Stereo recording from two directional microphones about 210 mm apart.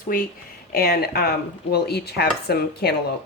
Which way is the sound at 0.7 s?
45° left (ahead or behind).